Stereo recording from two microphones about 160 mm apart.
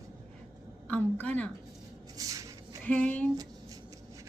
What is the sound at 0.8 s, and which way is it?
Speech, 5° left (ahead or behind).